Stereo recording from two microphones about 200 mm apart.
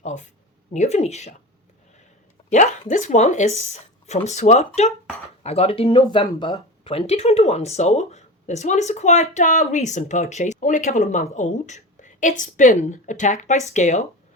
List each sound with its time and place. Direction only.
0.0 s speech: 35° left (ahead or behind)
2.5 s speech: 40° left (ahead or behind)